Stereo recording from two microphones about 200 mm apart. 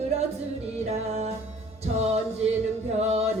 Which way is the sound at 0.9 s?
30° right (ahead or behind).